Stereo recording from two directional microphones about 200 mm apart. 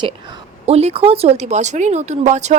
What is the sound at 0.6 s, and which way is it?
Speech, 30° right (ahead or behind).